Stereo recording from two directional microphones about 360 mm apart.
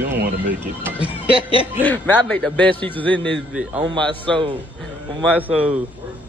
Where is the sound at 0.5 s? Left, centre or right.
Centre.